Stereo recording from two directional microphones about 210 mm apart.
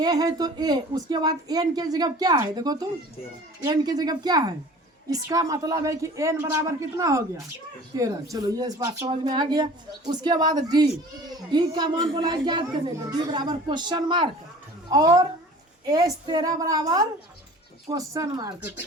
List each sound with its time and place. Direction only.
0.0 s a woman's voice: 15° right (ahead or behind)